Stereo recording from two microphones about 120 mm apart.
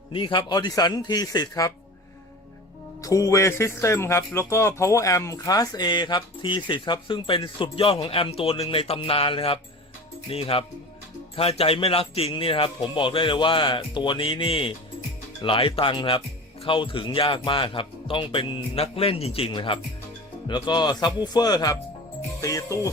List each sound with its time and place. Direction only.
0.1 s speech: 45° left (ahead or behind)
3.0 s speech: 25° left (ahead or behind)